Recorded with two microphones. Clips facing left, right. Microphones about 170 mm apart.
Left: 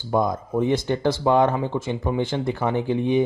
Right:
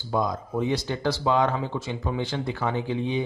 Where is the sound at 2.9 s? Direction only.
50° left (ahead or behind).